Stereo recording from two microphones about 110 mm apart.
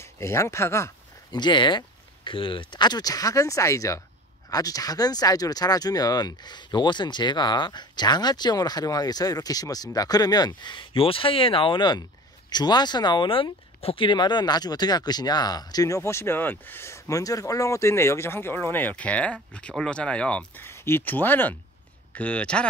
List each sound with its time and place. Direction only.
0.0 s speech: 25° left (ahead or behind)
1.3 s speech: 45° left (ahead or behind); by 20.6 s 10° left (ahead or behind)
20.6 s speech: 20° left (ahead or behind)